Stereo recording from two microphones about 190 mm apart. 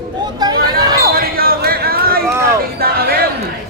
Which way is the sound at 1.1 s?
50° right (ahead or behind).